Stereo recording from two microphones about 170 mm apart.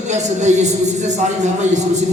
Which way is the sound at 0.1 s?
45° right (ahead or behind).